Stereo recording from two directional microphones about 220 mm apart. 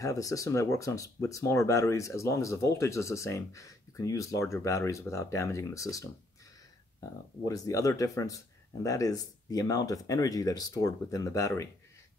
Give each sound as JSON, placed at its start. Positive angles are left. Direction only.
{"t": 0.0, "sound": "speech", "side_deg": 15}